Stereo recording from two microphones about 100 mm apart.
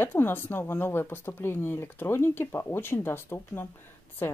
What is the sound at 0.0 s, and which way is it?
Speech, 20° left (ahead or behind).